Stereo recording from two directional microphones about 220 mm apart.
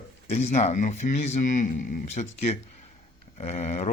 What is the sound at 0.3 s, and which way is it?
A man's voice, 30° left (ahead or behind).